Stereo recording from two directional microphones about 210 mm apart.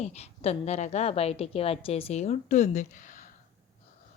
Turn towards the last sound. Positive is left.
turn(degrees=40)  # may be behind; listen again after turning